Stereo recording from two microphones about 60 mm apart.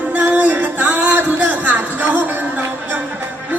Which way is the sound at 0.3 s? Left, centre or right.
Right.